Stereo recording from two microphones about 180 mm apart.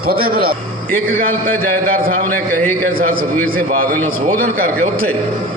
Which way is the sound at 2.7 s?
55° right (ahead or behind).